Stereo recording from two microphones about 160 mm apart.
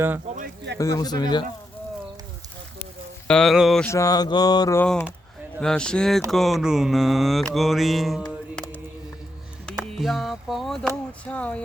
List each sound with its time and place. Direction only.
0.3 s a sound: 75° right (ahead or behind)
0.8 s speech: 20° left (ahead or behind)
3.2 s speech: 5° left (ahead or behind)
3.8 s speech: 20° left (ahead or behind)
4.8 s speech: 10° left (ahead or behind)
7.5 s music: centre (ahead or behind)
9.7 s music: 5° left (ahead or behind)
10.0 s speech: centre (ahead or behind)